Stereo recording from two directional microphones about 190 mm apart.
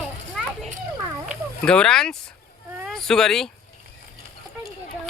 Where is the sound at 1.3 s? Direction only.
5° left (ahead or behind).